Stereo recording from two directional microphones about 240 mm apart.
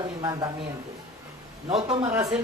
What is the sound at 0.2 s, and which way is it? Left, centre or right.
Speech, centre.